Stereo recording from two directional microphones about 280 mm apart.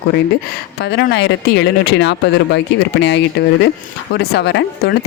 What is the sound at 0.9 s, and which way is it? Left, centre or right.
Speech, left.